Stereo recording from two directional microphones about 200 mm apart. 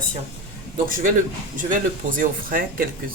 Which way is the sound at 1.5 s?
40° right (ahead or behind).